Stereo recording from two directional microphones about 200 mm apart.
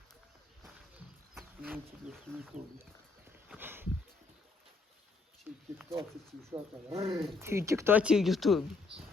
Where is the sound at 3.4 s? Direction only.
10° right (ahead or behind).